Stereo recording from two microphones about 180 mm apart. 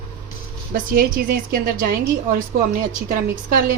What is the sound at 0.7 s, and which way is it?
A woman's voice, 55° right (ahead or behind).